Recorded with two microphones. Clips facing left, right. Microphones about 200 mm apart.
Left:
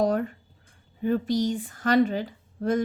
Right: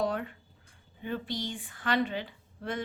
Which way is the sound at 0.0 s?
40° left (ahead or behind).